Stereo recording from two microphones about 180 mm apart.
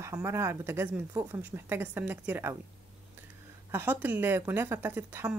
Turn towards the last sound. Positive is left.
turn(degrees=-10)  # may be behind; listen again after turning